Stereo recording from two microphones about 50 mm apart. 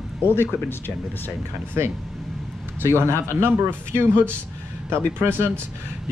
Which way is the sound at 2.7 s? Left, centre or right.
Right.